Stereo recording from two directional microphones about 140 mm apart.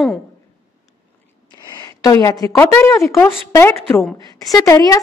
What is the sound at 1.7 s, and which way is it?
A woman's voice, 25° left (ahead or behind).